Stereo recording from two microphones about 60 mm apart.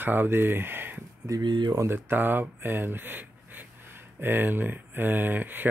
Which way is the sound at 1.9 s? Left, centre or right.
Right.